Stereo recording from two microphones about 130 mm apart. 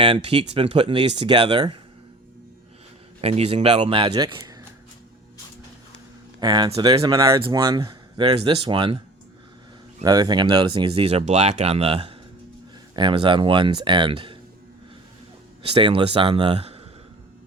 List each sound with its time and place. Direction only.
0.0 s speech: 40° right (ahead or behind)
3.2 s speech: 55° right (ahead or behind)
4.1 s speech: 30° right (ahead or behind)
6.4 s speech: 35° right (ahead or behind)
7.3 s speech: 40° right (ahead or behind)
10.0 s speech: 30° right (ahead or behind)
15.7 s speech: 40° right (ahead or behind)